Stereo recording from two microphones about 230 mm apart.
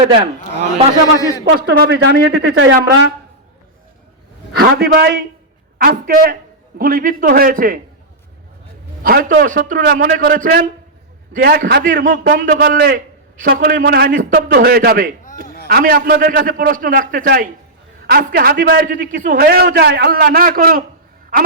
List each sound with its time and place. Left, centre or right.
1.5 s speech: right
4.5 s a man's voice: right
9.0 s a man's voice: right
21.3 s a sound: right